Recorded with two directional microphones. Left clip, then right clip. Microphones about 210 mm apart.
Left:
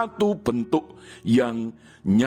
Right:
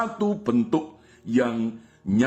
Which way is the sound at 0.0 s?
50° left (ahead or behind).